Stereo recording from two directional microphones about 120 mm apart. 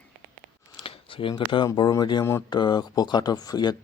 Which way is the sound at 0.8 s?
50° left (ahead or behind).